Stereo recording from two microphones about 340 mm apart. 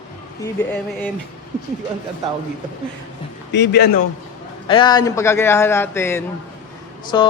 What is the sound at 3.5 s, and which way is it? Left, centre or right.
Speech, left.